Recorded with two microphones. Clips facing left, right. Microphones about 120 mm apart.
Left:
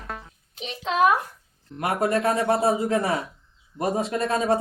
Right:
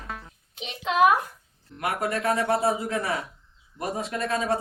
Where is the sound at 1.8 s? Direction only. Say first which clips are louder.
Left 4 dB; 30° left (ahead or behind).